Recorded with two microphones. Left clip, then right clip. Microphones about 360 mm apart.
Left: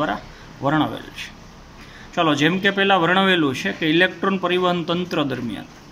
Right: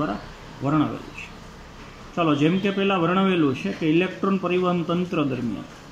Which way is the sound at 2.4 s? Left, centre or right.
Left.